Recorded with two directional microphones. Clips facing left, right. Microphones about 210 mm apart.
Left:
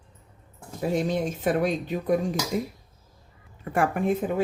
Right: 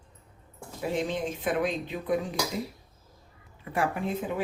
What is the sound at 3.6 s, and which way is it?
Speech, 50° left (ahead or behind).